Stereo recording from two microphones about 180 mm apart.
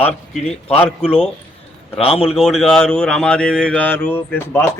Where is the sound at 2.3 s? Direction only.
Centre (ahead or behind).